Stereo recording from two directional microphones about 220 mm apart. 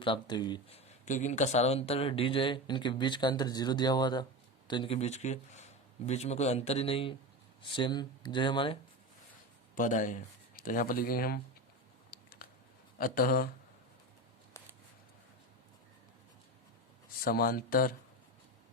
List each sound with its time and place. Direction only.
0.0 s speech: 20° left (ahead or behind)
9.7 s speech: 35° left (ahead or behind)
12.1 s biting: 45° left (ahead or behind)
13.0 s speech: 40° left (ahead or behind)
17.2 s speech: 40° left (ahead or behind)